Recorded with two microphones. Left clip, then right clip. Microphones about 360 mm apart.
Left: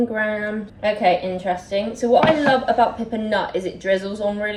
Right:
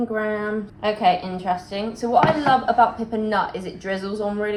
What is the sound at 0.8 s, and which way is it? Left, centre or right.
A woman's voice, right.